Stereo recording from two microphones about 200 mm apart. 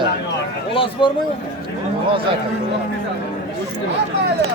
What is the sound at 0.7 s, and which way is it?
Speech, 25° left (ahead or behind).